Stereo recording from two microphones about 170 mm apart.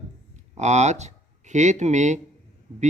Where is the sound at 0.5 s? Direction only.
40° right (ahead or behind).